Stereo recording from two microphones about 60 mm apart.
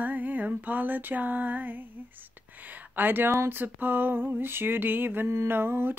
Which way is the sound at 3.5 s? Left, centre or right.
Right.